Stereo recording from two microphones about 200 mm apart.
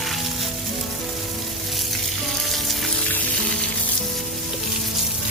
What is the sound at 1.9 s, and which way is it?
Frying, centre (ahead or behind).